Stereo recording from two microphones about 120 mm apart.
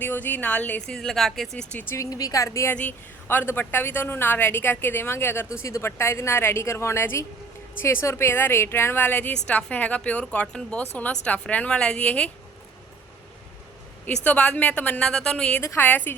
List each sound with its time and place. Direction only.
0.0 s a woman's voice: 15° left (ahead or behind)
2.0 s a woman's voice: 30° left (ahead or behind)
2.7 s a woman's voice: 15° left (ahead or behind)
14.3 s a woman's voice: 10° left (ahead or behind)
15.6 s a woman's voice: 20° left (ahead or behind)